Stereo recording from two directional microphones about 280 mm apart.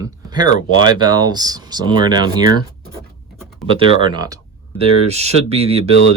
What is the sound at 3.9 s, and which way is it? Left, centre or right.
Speech, centre.